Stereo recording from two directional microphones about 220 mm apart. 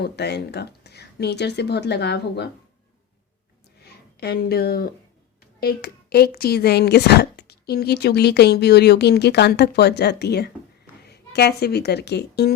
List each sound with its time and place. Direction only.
0.0 s speech: 50° left (ahead or behind)
4.2 s a woman's voice: 45° left (ahead or behind)